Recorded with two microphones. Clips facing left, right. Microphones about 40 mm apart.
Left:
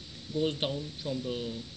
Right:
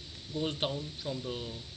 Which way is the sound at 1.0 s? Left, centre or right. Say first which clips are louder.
Left 3 dB; centre.